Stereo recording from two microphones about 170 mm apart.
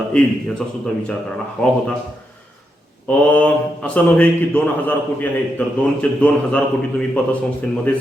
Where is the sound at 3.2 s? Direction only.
10° left (ahead or behind).